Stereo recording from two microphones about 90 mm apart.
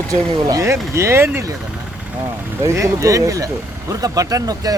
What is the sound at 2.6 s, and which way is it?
Speech, 35° right (ahead or behind).